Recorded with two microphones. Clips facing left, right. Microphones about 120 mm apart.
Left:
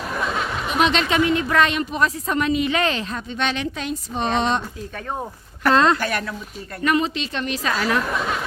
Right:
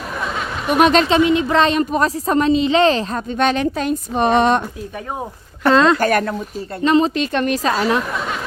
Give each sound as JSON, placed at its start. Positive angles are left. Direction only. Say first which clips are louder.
{"t": 0.7, "sound": "a woman's voice", "louder": "right 7 dB", "side_deg": -50}
{"t": 1.0, "sound": "a woman's voice", "louder": "right 5 dB", "side_deg": -25}
{"t": 5.6, "sound": "a woman's voice", "louder": "right 4 dB", "side_deg": -25}
{"t": 6.0, "sound": "a woman's voice", "louder": "right 8 dB", "side_deg": -50}
{"t": 7.6, "sound": "a woman's voice", "louder": "right 4 dB", "side_deg": -30}